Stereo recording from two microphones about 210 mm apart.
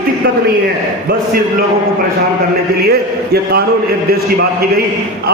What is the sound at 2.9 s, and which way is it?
Speech, 50° right (ahead or behind).